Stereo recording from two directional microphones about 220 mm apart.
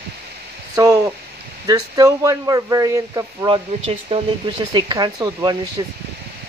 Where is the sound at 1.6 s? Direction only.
15° right (ahead or behind).